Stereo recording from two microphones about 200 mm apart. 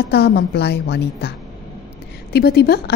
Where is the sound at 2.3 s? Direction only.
55° left (ahead or behind).